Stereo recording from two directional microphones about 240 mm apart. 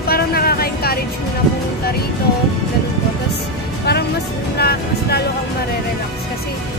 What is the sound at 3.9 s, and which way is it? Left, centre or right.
Speech, left.